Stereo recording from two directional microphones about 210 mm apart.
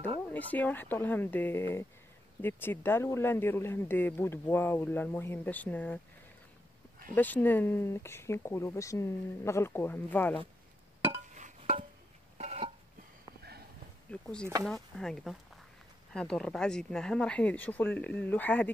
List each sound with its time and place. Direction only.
0.3 s speech: 10° left (ahead or behind)
7.2 s speech: 10° left (ahead or behind)
11.1 s chink: 35° right (ahead or behind)
12.4 s a sound: 30° right (ahead or behind)
13.4 s sniff: 50° right (ahead or behind)
14.1 s speech: 5° left (ahead or behind)